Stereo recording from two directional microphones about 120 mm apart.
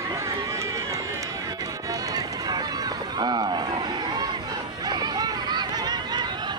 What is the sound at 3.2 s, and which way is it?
Run, 35° right (ahead or behind).